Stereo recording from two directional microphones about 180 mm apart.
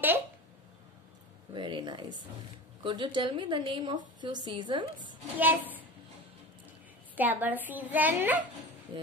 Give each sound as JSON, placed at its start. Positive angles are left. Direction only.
{"t": 1.5, "sound": "speech", "side_deg": -25}
{"t": 5.4, "sound": "a child's voice", "side_deg": -10}
{"t": 7.2, "sound": "a woman's voice", "side_deg": -10}